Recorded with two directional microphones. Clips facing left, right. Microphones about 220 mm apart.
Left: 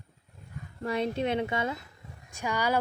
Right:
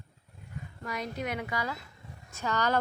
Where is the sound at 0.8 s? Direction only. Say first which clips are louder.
Left 7 dB; 30° left (ahead or behind).